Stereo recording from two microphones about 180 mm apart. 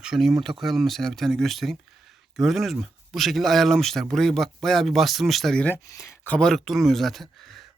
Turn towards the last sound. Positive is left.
turn(degrees=0)  # may be behind; listen again after turning